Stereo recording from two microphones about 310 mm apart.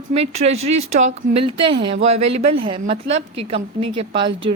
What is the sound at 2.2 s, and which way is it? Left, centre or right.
Speech, right.